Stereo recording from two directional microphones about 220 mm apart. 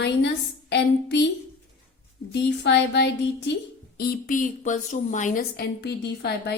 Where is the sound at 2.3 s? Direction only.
50° left (ahead or behind).